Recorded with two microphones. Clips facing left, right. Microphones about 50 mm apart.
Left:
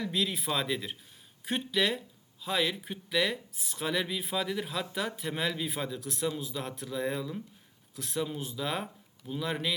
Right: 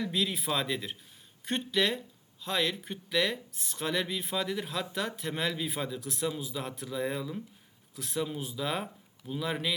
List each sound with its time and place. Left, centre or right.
0.0 s speech: centre